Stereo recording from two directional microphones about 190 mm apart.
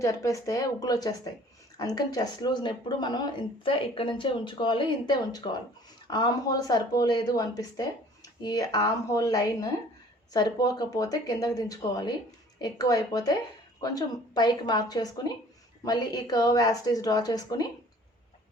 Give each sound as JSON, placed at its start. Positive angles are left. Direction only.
{"t": 0.0, "sound": "speech", "side_deg": 15}